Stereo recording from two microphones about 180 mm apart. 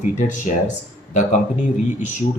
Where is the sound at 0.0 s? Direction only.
45° left (ahead or behind).